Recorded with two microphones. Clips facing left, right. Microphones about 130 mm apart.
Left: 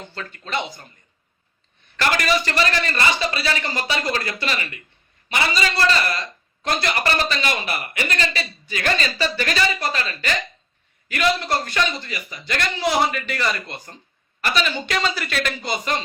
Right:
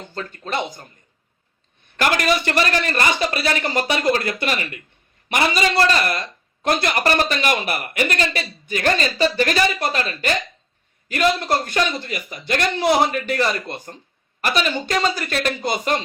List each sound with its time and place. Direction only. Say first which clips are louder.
0.1 s a man's voice: right 2 dB; 40° right (ahead or behind)
2.0 s a man's voice: right 2 dB; 50° right (ahead or behind)